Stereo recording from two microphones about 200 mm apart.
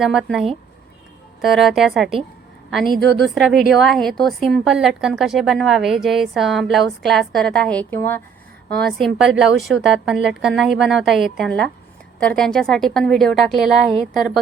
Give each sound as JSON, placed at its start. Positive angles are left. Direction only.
{"t": 0.0, "sound": "a woman's voice", "side_deg": 0}
{"t": 3.0, "sound": "a woman's voice", "side_deg": -60}
{"t": 3.2, "sound": "a woman's voice", "side_deg": 0}